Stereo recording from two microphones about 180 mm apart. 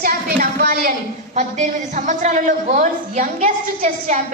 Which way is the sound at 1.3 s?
40° right (ahead or behind).